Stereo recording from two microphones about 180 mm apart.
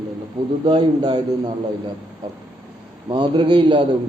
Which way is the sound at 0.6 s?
25° right (ahead or behind).